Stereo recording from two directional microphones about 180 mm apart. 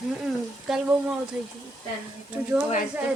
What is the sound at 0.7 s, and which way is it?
Speech, centre (ahead or behind).